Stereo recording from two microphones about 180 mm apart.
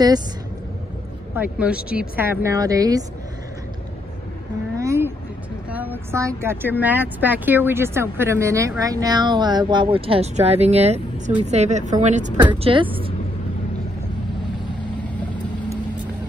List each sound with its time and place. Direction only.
1.3 s speech: 10° right (ahead or behind)
4.7 s vehicle: 15° right (ahead or behind)
5.7 s speech: 10° right (ahead or behind); by 12.8 s 30° right (ahead or behind)